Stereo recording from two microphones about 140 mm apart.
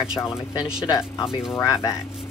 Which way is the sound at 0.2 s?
20° left (ahead or behind).